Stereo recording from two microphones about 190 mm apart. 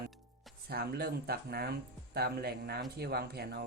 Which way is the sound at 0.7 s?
55° right (ahead or behind).